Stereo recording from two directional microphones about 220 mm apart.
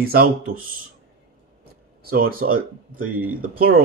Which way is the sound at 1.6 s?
45° right (ahead or behind).